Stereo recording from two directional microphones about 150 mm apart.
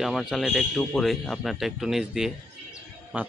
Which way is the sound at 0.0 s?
Centre (ahead or behind).